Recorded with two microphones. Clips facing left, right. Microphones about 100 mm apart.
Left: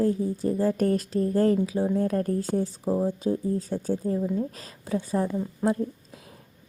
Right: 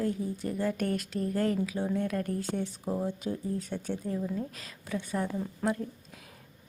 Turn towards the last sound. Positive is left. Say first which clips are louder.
# left 5 dB
turn(degrees=30)  # may be behind; listen again after turning